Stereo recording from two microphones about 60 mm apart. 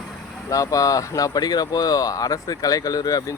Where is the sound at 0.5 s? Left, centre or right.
Left.